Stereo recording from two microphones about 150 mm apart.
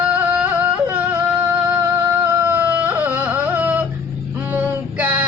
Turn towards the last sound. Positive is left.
turn(degrees=-10)  # may be behind; listen again after turning